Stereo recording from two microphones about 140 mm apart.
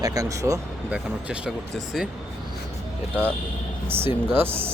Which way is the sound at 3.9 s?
15° right (ahead or behind).